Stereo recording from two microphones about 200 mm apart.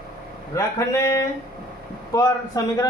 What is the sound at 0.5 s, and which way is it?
A man's voice, 15° left (ahead or behind).